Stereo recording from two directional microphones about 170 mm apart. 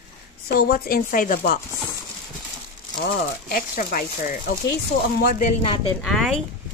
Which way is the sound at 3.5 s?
55° left (ahead or behind).